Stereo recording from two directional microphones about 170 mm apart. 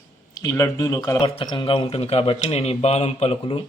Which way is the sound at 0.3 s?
20° left (ahead or behind).